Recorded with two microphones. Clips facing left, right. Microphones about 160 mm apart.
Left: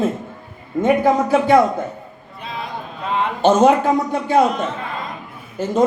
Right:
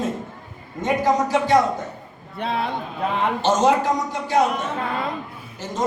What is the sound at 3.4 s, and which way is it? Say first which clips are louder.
A man's voice: left 6 dB; 55° left (ahead or behind).